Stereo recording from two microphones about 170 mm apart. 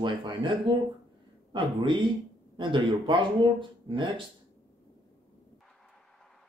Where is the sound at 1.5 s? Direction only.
30° right (ahead or behind).